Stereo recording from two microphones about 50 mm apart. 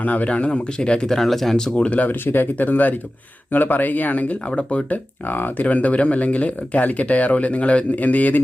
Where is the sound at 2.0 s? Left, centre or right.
Left.